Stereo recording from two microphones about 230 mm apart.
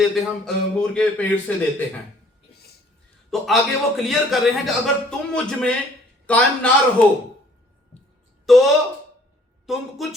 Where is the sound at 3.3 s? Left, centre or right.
Centre.